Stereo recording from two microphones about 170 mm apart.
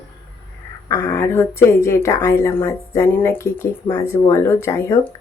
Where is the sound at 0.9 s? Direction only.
15° left (ahead or behind).